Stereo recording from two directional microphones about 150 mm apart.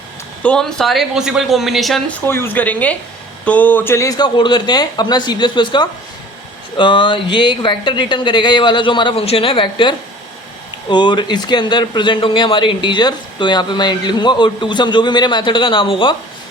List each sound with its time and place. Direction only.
0.4 s speech: 5° left (ahead or behind)
2.2 s speech: 15° left (ahead or behind); by 16.1 s 35° left (ahead or behind)